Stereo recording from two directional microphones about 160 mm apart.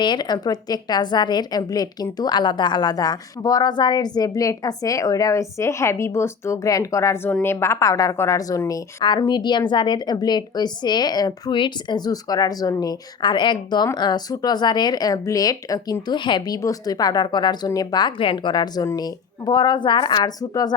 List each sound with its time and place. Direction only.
0.0 s a woman's voice: 30° left (ahead or behind)